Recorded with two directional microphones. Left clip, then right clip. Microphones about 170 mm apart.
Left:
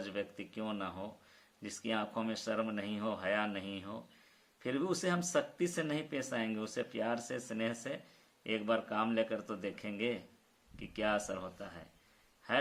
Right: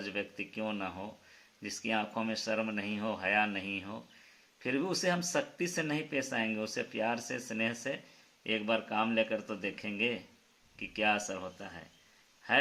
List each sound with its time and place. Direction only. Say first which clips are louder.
0.0 s speech: right 3 dB; 25° right (ahead or behind)